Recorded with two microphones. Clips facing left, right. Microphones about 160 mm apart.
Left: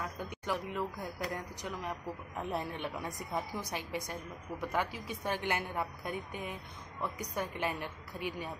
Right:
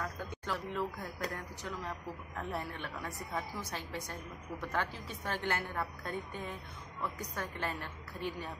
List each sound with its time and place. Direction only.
0.2 s a man's voice: 15° left (ahead or behind)